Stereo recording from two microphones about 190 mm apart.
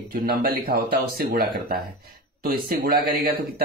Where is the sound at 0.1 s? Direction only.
50° right (ahead or behind).